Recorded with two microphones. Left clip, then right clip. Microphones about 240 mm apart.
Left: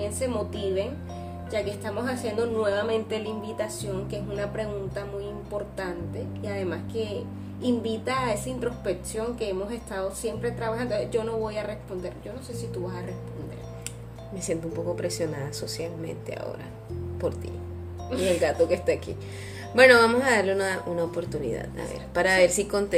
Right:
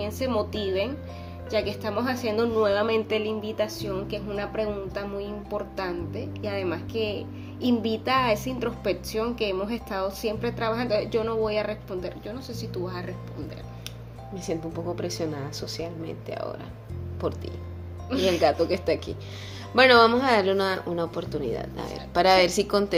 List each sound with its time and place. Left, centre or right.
0.0 s a woman's voice: right
6.4 s a woman's voice: right
14.4 s a woman's voice: centre